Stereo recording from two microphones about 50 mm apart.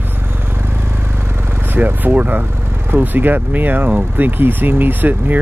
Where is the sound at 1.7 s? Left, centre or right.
Right.